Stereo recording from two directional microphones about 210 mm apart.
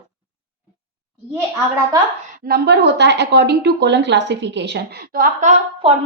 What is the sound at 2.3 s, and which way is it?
A woman's voice, 45° right (ahead or behind).